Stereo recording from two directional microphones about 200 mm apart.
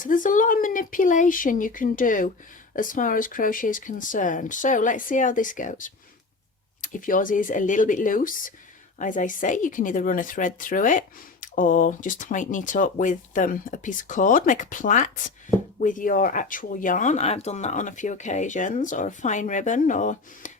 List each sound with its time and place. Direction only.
0.0 s speech: 40° left (ahead or behind)